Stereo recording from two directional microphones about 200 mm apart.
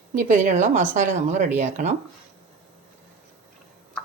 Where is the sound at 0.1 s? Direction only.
40° right (ahead or behind).